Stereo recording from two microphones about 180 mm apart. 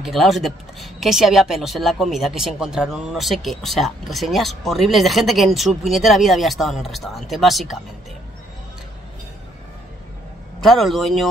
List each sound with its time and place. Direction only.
0.0 s speech: centre (ahead or behind)
10.6 s speech: centre (ahead or behind)